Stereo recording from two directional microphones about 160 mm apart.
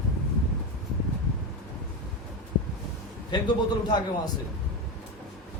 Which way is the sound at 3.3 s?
30° left (ahead or behind).